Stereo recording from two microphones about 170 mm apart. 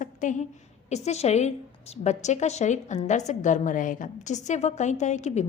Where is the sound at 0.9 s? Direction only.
40° left (ahead or behind).